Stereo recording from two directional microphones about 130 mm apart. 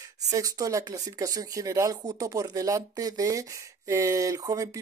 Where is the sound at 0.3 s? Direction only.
25° right (ahead or behind).